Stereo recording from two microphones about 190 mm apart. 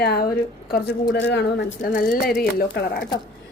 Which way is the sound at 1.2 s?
65° left (ahead or behind).